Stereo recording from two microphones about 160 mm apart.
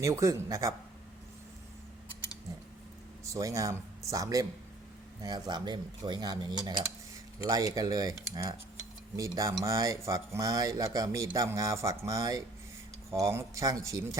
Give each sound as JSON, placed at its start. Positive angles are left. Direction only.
{"t": 0.0, "sound": "speech", "side_deg": -20}
{"t": 3.3, "sound": "speech", "side_deg": -20}